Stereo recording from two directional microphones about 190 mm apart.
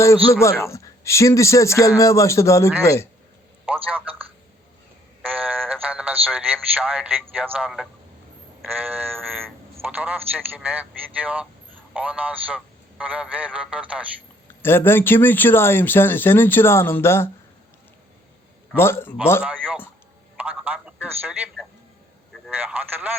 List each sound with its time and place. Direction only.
0.0 s speech: 15° left (ahead or behind)
3.8 s a man's voice: 10° right (ahead or behind)
5.2 s a sound: 10° right (ahead or behind)
5.9 s a man's voice: 10° right (ahead or behind)
8.8 s a man's voice: 10° right (ahead or behind)
14.6 s speech: 10° left (ahead or behind)
18.8 s speech: 10° left (ahead or behind)
19.4 s a man's voice: 5° right (ahead or behind)